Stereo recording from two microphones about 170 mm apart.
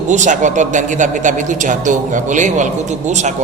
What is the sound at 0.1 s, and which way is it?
A man's voice, 45° right (ahead or behind).